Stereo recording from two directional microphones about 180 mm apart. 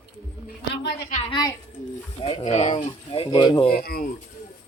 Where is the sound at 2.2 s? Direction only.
35° left (ahead or behind).